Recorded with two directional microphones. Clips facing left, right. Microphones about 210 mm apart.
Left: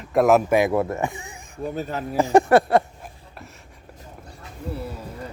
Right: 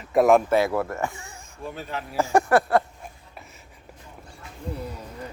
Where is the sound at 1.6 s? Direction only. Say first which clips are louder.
Left 6 dB; 40° left (ahead or behind).